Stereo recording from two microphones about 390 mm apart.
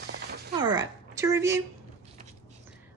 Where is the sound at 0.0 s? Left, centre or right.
Right.